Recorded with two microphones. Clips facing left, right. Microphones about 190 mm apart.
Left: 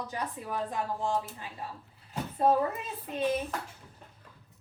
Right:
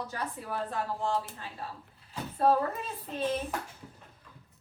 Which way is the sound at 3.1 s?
10° left (ahead or behind).